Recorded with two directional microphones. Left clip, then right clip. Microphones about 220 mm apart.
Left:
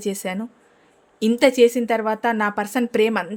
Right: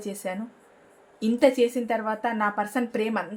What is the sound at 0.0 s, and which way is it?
Speech, 45° left (ahead or behind).